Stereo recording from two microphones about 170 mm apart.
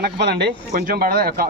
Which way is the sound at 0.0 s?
85° right.